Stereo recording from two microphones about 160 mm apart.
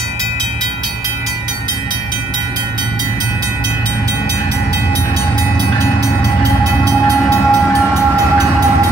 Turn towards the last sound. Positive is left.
turn(degrees=15)  # may be behind; listen again after turning